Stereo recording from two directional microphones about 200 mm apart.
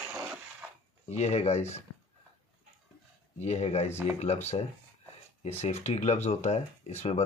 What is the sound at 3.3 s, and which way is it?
Speech, 35° left (ahead or behind).